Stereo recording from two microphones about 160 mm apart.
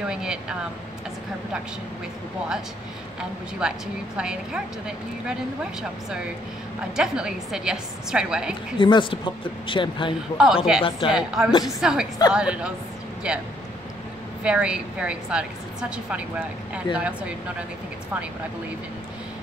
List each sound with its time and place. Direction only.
0.1 s a woman's voice: 5° right (ahead or behind)
3.2 s a woman's voice: 5° right (ahead or behind)
8.7 s a woman's voice: 30° left (ahead or behind)
10.3 s a woman's voice: 5° right (ahead or behind)